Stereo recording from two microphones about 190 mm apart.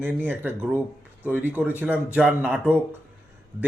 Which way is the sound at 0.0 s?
10° right (ahead or behind).